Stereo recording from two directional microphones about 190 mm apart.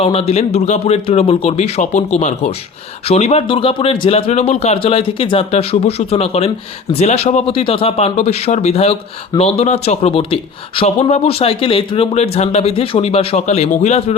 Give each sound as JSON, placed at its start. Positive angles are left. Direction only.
{"t": 0.0, "sound": "speech", "side_deg": 30}